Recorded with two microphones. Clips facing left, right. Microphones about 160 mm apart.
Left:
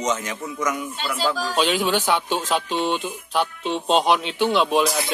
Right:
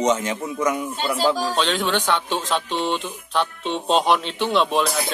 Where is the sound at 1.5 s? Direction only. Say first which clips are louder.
Left 1 dB; 10° left (ahead or behind).